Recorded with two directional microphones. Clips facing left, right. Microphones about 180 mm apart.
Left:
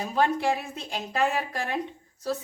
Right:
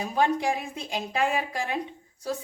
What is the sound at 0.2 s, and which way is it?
Speech, 15° right (ahead or behind).